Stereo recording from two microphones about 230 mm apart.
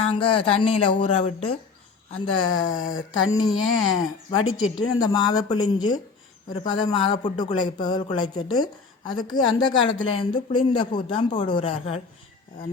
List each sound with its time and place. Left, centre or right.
0.0 s a man's voice: left
3.1 s speech: left
3.7 s a man's voice: centre
4.4 s speech: left
4.9 s a man's voice: centre